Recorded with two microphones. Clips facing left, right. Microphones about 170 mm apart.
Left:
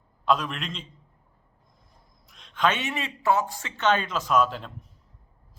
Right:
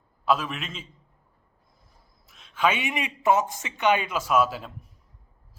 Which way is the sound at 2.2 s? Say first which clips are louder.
Even; 5° right (ahead or behind).